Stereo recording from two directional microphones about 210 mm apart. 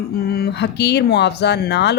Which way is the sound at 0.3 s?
50° left (ahead or behind).